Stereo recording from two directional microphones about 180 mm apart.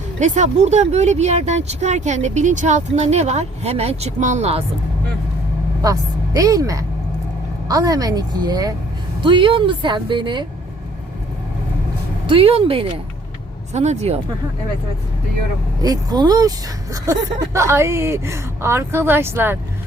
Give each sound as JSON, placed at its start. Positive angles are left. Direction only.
{"t": 0.2, "sound": "speech", "side_deg": -40}
{"t": 5.8, "sound": "a woman's voice", "side_deg": -20}
{"t": 12.2, "sound": "speech", "side_deg": -30}
{"t": 15.8, "sound": "speech", "side_deg": -20}